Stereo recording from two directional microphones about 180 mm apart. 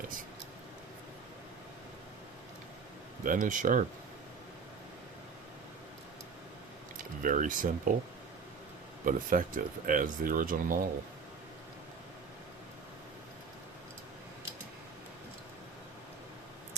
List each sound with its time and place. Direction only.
3.2 s speech: 50° right (ahead or behind)
7.2 s speech: 50° right (ahead or behind)
9.0 s speech: 50° right (ahead or behind)